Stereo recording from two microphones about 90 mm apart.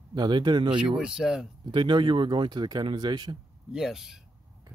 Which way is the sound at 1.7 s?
60° right (ahead or behind).